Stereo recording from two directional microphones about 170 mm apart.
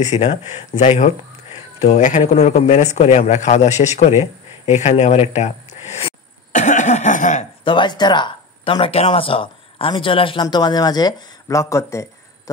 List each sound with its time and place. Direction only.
0.0 s a man's voice: 40° left (ahead or behind)
7.6 s speech: 30° left (ahead or behind)